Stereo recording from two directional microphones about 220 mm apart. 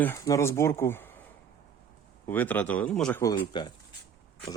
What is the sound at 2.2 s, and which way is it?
Speech, 10° left (ahead or behind).